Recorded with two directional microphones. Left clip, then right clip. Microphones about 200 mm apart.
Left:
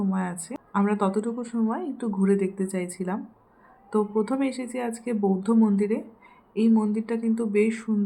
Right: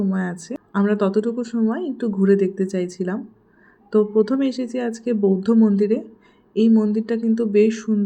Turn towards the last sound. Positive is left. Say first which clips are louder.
# right 7 dB
turn(degrees=-15)  # may be behind; listen again after turning